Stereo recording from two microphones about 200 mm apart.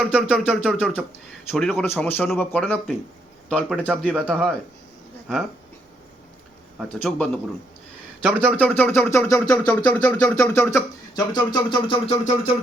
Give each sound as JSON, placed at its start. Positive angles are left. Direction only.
{"t": 0.1, "sound": "speech", "side_deg": -5}
{"t": 6.7, "sound": "speech", "side_deg": 5}
{"t": 8.2, "sound": "speech", "side_deg": -10}
{"t": 8.5, "sound": "speech", "side_deg": 10}